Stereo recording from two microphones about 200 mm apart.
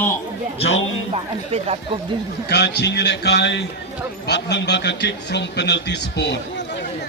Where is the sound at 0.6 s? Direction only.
60° left (ahead or behind).